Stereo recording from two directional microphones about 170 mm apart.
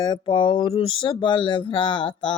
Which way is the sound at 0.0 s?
25° left (ahead or behind).